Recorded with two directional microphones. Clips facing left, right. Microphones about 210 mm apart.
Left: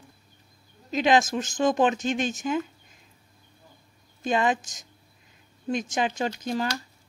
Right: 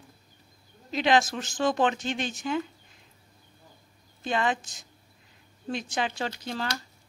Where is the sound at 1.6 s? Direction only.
15° left (ahead or behind).